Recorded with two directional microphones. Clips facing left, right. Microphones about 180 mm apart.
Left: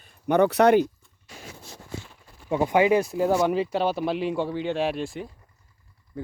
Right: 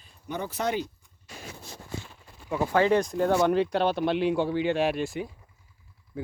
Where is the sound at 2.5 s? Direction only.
20° left (ahead or behind).